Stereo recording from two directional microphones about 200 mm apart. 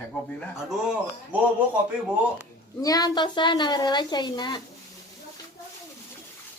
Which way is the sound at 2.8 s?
20° left (ahead or behind).